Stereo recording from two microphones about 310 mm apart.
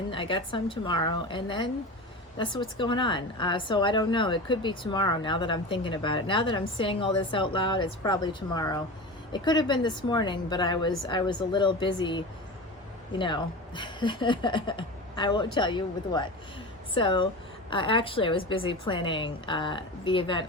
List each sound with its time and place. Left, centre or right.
0.1 s speech: centre